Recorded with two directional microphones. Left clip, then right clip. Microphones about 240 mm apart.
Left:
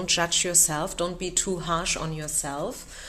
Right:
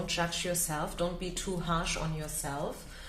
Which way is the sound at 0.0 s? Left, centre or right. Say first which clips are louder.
Left 8 dB; left.